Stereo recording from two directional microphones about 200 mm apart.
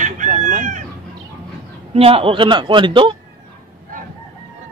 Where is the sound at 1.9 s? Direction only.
30° right (ahead or behind).